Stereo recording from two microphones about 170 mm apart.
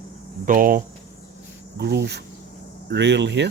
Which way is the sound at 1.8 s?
75° right (ahead or behind).